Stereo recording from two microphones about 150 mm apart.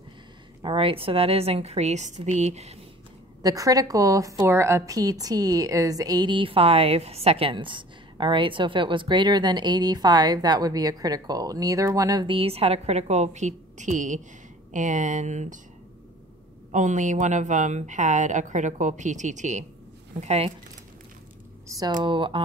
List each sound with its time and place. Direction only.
0.6 s a woman's voice: 35° right (ahead or behind)
3.4 s a woman's voice: 25° right (ahead or behind); by 15.6 s 55° right (ahead or behind)
16.7 s a woman's voice: 55° right (ahead or behind)
21.6 s speech: 25° right (ahead or behind)
22.0 s speech: 35° right (ahead or behind)